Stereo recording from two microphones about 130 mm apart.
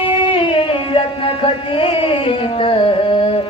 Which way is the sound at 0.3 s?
40° left (ahead or behind).